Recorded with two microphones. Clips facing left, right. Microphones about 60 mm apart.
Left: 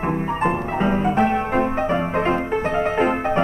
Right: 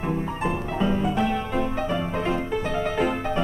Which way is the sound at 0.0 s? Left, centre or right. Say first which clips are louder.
Left 5 dB; left.